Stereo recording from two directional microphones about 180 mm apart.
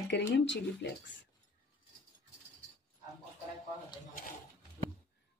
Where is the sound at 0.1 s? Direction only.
75° left (ahead or behind).